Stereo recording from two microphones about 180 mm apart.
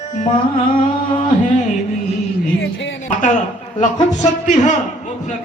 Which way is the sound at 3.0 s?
45° left (ahead or behind).